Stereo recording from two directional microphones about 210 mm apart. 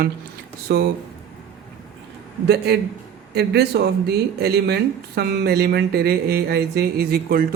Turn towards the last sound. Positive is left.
turn(degrees=-45)  # may be behind; listen again after turning